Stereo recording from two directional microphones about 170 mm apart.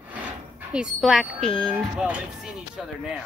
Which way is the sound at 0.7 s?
5° right (ahead or behind).